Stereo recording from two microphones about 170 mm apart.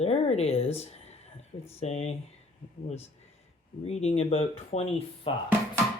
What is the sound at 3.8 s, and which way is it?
Speech, 40° left (ahead or behind).